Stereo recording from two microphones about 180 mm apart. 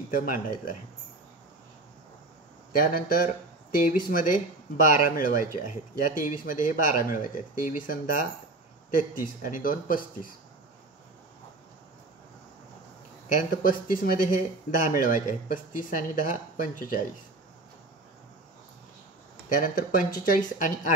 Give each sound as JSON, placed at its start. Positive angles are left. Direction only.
{"t": 0.1, "sound": "speech", "side_deg": 50}
{"t": 2.7, "sound": "speech", "side_deg": 50}
{"t": 13.3, "sound": "speech", "side_deg": 45}
{"t": 19.5, "sound": "speech", "side_deg": 50}